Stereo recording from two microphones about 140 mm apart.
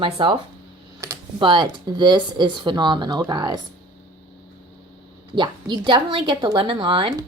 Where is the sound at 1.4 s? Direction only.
35° right (ahead or behind).